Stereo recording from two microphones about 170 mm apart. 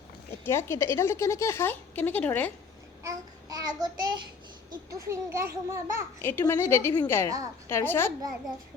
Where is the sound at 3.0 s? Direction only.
20° right (ahead or behind).